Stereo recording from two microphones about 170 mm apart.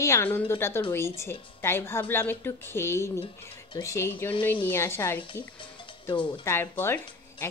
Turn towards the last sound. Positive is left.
turn(degrees=15)  # may be behind; listen again after turning